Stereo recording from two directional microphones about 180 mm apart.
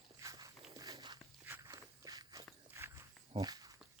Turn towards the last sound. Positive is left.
turn(degrees=-20)  # may be behind; listen again after turning